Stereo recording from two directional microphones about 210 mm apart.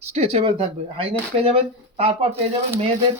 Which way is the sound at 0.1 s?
30° right (ahead or behind).